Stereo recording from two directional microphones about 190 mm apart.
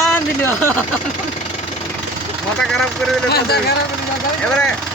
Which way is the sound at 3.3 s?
55° left (ahead or behind).